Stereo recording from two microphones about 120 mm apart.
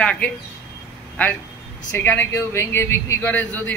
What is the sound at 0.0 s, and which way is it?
Speech, 10° left (ahead or behind).